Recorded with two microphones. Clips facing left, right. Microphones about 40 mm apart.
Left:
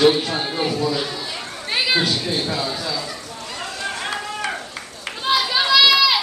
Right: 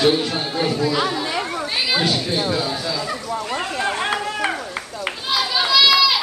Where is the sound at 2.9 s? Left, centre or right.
Right.